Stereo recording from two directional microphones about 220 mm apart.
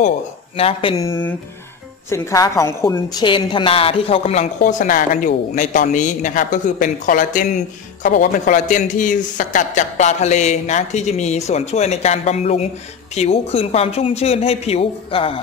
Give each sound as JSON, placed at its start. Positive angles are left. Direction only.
{"t": 0.6, "sound": "a woman's voice", "side_deg": 25}